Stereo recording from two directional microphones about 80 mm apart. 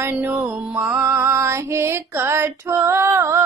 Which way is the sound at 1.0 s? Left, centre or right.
Right.